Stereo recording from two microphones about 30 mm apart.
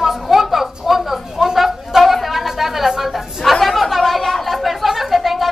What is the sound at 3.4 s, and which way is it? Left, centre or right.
Chatter, centre.